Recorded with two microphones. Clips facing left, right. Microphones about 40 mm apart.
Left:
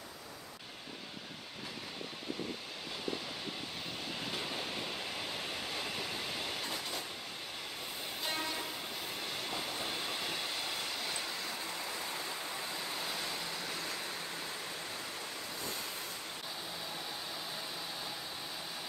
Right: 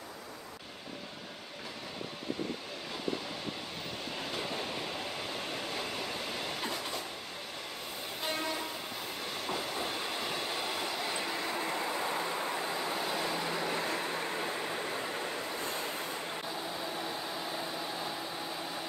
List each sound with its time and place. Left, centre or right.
9.5 s train: centre
11.3 s vehicle: right